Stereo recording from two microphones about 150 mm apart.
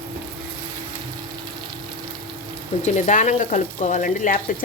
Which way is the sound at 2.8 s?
55° left (ahead or behind).